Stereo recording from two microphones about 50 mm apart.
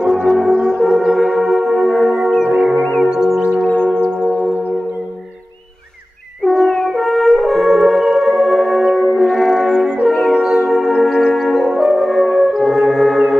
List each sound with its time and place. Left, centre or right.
0.0 s french horn: centre
0.7 s music: centre
3.1 s music: centre
4.0 s church bell: right
6.4 s french horn: centre
10.0 s music: centre
10.7 s french horn: centre